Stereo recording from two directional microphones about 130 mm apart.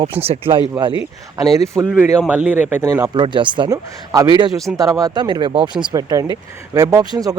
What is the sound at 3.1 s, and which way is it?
Speech, 40° right (ahead or behind).